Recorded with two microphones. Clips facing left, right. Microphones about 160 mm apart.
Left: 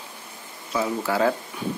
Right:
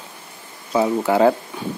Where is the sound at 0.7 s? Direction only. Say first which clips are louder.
Right 7 dB; 25° right (ahead or behind).